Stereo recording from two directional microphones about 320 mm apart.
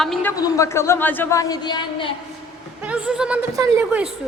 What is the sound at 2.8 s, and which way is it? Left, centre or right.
Speech, centre.